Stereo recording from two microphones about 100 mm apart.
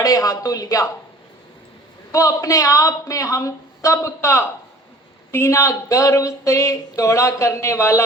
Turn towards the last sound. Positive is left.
turn(degrees=30)  # may be behind; listen again after turning